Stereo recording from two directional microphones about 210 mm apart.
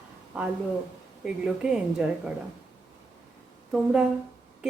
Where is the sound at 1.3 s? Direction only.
5° right (ahead or behind).